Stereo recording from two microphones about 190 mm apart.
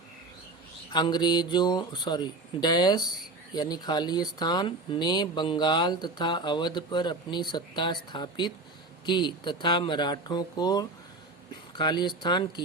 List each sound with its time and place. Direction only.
0.9 s speech: 20° left (ahead or behind)